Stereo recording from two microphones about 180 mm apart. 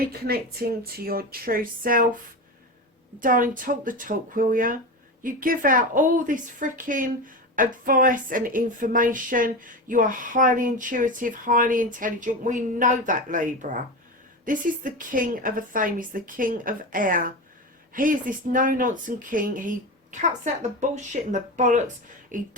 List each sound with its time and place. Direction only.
0.1 s speech: 60° right (ahead or behind)
3.2 s speech: 50° right (ahead or behind)